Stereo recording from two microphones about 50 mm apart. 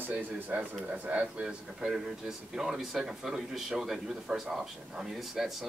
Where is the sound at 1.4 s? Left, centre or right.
Centre.